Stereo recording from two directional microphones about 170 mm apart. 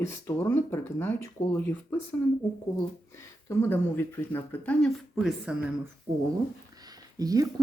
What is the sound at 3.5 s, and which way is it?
Speech, 15° left (ahead or behind).